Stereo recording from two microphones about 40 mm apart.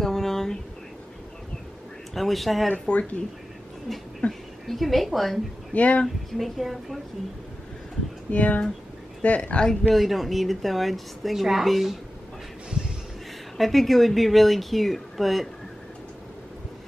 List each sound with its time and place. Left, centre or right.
0.0 s a sound: centre
2.1 s a woman's voice: centre
2.9 s speech: left
4.3 s a woman's voice: centre
5.7 s speech: left
6.0 s a woman's voice: centre
8.3 s speech: left
9.9 s a woman's voice: centre
13.6 s a woman's voice: centre